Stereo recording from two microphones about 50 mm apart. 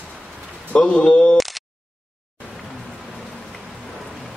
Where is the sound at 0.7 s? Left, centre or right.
Left.